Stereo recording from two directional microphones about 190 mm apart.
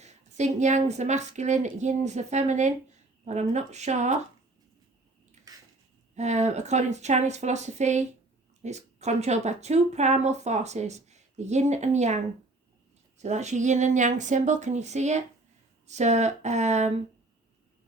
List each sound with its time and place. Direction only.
0.0 s a sound: 35° right (ahead or behind)
0.9 s speech: 35° right (ahead or behind)
6.1 s speech: 40° right (ahead or behind)